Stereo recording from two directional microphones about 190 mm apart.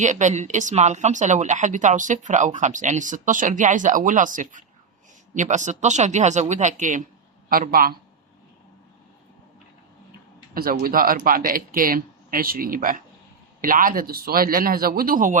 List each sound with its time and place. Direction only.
0.0 s speech: 40° right (ahead or behind)
10.5 s speech: 50° right (ahead or behind)